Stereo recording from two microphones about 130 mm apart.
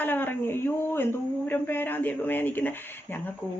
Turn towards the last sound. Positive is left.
turn(degrees=15)  # may be behind; listen again after turning